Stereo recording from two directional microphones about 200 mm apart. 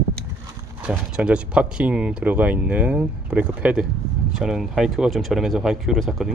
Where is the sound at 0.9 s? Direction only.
5° right (ahead or behind).